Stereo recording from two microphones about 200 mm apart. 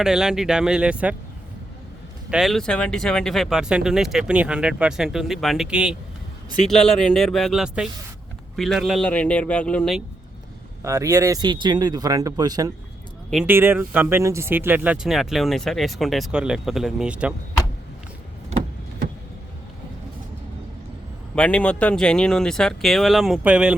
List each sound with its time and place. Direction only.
0.0 s speech: 5° right (ahead or behind)
2.3 s speech: centre (ahead or behind)
10.8 s speech: 15° right (ahead or behind)
13.3 s speech: 10° right (ahead or behind)
21.3 s speech: 5° left (ahead or behind)